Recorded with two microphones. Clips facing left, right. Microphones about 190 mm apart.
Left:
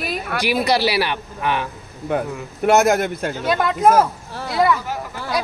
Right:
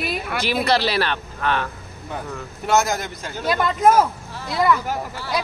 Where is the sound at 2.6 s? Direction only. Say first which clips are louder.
Left 6 dB; 60° left (ahead or behind).